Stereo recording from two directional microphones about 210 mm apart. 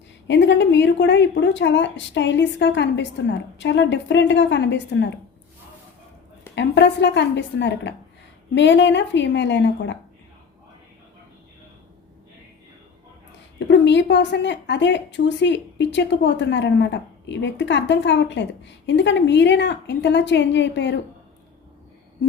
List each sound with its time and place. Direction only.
0.3 s a woman's voice: 55° left (ahead or behind)
6.6 s a woman's voice: 55° left (ahead or behind)
13.6 s a woman's voice: 55° left (ahead or behind)